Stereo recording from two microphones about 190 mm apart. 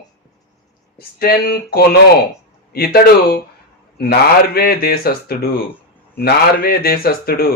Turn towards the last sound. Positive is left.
turn(degrees=50)  # may be behind; listen again after turning